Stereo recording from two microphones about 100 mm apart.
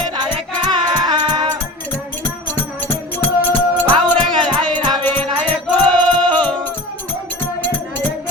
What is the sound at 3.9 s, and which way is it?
Music, 50° right (ahead or behind).